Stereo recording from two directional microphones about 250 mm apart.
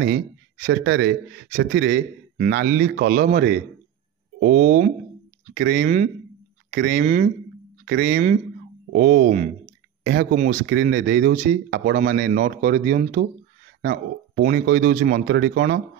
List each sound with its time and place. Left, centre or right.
0.7 s a man's voice: right
7.8 s speech: right
10.7 s speech: right